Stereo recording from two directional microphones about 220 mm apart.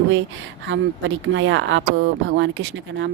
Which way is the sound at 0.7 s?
60° right (ahead or behind).